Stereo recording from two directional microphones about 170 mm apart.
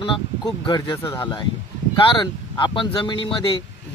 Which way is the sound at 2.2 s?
30° left (ahead or behind).